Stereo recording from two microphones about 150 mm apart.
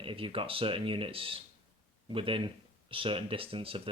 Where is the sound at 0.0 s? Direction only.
35° right (ahead or behind).